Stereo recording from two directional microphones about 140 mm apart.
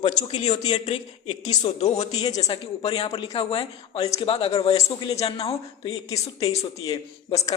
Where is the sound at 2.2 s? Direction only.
25° left (ahead or behind).